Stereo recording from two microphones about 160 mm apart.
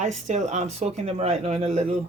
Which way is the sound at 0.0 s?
45° right (ahead or behind).